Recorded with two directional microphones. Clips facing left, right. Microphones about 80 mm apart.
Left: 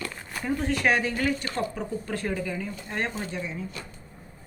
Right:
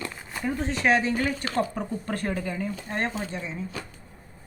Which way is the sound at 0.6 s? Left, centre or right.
Right.